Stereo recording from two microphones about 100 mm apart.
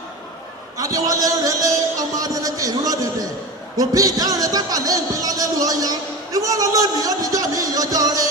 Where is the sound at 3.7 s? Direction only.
35° right (ahead or behind).